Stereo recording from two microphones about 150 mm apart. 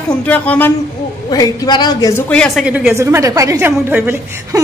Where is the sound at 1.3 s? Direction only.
25° left (ahead or behind).